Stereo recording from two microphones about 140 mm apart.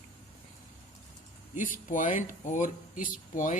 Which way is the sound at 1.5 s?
70° left (ahead or behind).